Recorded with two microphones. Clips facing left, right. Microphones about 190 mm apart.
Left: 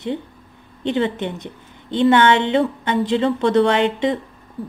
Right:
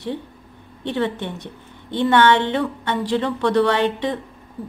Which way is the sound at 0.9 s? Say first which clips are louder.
Left 1 dB; 20° left (ahead or behind).